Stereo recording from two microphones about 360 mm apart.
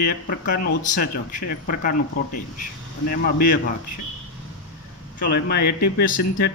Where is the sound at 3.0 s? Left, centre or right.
Left.